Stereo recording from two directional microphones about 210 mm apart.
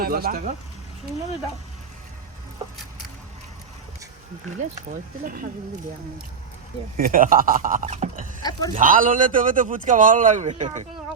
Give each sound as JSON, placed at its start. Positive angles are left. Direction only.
{"t": 0.0, "sound": "speech", "side_deg": -45}
{"t": 5.2, "sound": "speech", "side_deg": -45}
{"t": 7.0, "sound": "speech", "side_deg": -40}
{"t": 8.4, "sound": "speech", "side_deg": 20}
{"t": 8.7, "sound": "speech", "side_deg": -40}